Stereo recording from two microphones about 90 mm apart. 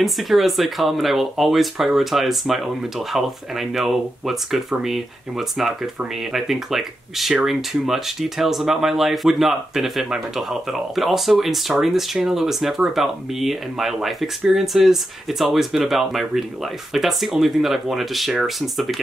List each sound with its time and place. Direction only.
0.0 s speech: centre (ahead or behind)